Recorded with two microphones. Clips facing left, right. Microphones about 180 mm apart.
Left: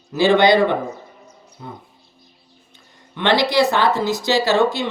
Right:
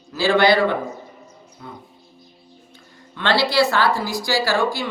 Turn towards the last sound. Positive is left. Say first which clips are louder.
# left 4 dB
turn(degrees=20)  # may be behind; listen again after turning